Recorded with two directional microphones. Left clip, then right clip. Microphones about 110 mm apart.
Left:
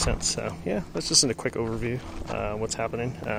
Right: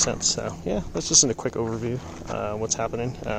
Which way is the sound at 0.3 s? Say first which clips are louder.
Right 2 dB; 15° right (ahead or behind).